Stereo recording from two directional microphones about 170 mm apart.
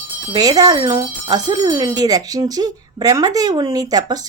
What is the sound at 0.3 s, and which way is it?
Speech, 25° right (ahead or behind).